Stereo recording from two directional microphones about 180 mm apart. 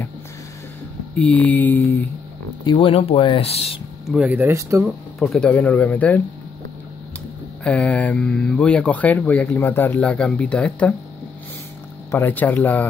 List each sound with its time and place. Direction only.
1.1 s speech: 5° left (ahead or behind)
2.6 s speech: 25° left (ahead or behind)
4.1 s speech: 5° right (ahead or behind)
5.2 s speech: 5° left (ahead or behind)
7.6 s speech: 5° left (ahead or behind)
12.1 s speech: 10° left (ahead or behind)